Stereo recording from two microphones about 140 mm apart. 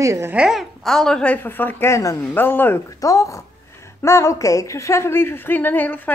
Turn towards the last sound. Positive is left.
turn(degrees=10)  # may be behind; listen again after turning